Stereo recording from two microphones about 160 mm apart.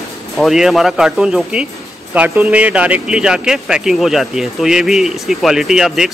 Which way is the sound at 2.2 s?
15° right (ahead or behind).